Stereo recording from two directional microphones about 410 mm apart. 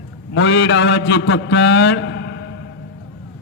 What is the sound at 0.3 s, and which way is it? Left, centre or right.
A man's voice, left.